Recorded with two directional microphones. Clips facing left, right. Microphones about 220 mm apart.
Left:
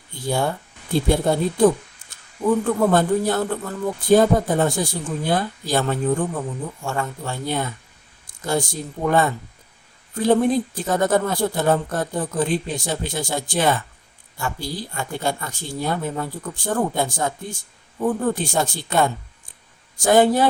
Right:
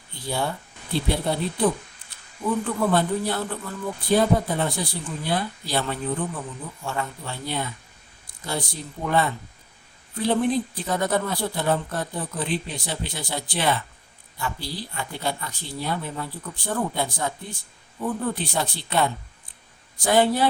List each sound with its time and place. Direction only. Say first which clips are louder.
0.3 s speech: left 5 dB; 45° left (ahead or behind)